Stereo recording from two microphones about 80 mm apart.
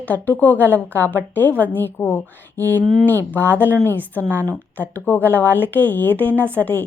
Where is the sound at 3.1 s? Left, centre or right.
Left.